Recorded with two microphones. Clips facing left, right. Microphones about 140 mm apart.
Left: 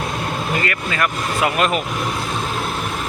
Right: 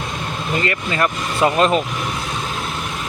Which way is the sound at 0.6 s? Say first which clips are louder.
Right 2 dB; 25° right (ahead or behind).